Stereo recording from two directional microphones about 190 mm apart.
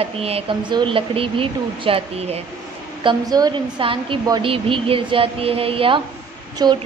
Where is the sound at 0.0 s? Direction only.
30° right (ahead or behind).